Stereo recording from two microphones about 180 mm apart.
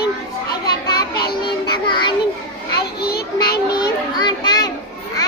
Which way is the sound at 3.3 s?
20° left (ahead or behind).